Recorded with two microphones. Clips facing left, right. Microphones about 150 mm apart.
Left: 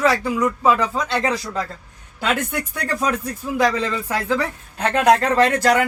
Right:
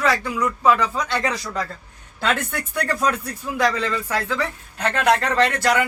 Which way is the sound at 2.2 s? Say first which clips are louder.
Left 1 dB; 15° left (ahead or behind).